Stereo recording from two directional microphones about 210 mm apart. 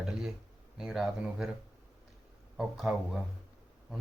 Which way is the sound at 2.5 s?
Centre (ahead or behind).